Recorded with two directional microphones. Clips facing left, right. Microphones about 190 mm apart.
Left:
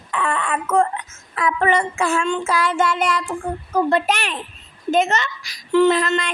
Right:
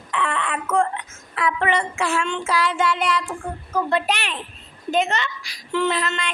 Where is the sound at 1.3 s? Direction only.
45° left (ahead or behind).